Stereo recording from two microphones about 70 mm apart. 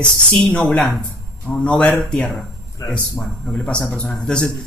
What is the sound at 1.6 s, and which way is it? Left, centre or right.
Speech, centre.